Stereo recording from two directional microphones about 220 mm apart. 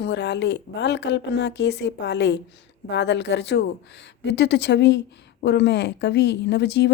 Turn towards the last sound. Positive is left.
turn(degrees=50)  # may be behind; listen again after turning